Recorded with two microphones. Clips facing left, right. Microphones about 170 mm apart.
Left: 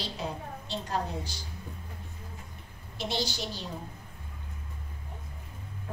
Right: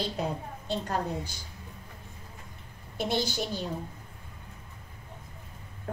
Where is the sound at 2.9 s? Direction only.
50° right (ahead or behind).